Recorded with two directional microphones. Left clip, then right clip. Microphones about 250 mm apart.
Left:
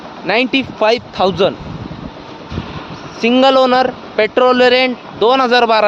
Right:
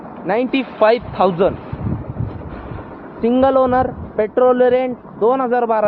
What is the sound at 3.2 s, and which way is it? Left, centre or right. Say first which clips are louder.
Speech: left 4 dB; left.